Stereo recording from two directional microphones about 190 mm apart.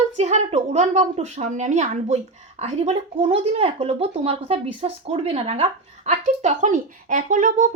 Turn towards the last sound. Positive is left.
turn(degrees=-40)  # may be behind; listen again after turning